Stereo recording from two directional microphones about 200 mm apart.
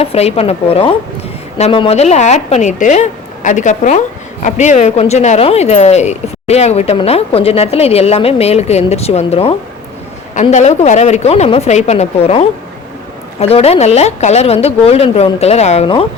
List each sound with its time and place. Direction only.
0.0 s a woman's voice: 30° left (ahead or behind)